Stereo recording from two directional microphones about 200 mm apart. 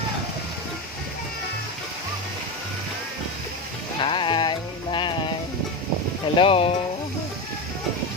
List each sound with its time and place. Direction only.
4.0 s music: 25° left (ahead or behind)
6.3 s speech: 25° left (ahead or behind)